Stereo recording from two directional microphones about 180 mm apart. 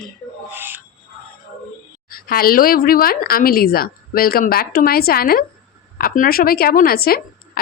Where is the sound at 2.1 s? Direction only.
55° left (ahead or behind).